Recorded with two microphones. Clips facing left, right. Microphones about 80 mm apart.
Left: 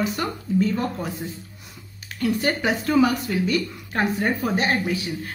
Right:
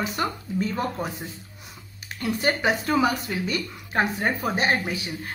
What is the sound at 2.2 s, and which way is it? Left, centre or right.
A woman's voice, centre.